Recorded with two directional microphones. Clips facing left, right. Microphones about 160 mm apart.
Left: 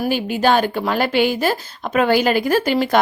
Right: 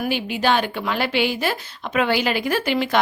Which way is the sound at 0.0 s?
45° left (ahead or behind).